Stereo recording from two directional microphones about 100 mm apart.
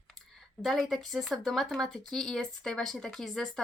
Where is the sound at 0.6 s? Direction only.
Centre (ahead or behind).